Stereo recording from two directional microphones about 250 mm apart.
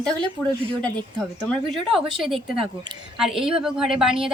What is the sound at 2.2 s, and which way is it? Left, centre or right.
Speech, right.